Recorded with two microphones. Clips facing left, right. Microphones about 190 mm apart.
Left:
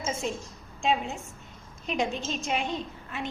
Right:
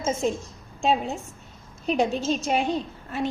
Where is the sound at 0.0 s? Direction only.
40° right (ahead or behind).